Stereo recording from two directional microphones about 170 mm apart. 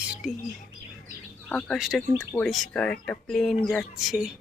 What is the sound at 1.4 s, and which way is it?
Speech, 5° left (ahead or behind).